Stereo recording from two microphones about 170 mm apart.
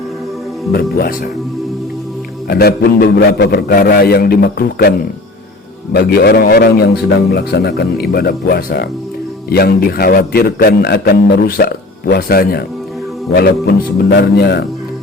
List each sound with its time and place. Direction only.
0.7 s a man's voice: 65° left (ahead or behind)
2.5 s a man's voice: 65° left (ahead or behind)